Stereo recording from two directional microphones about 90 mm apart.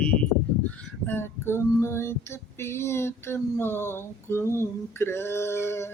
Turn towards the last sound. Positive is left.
turn(degrees=25)  # may be behind; listen again after turning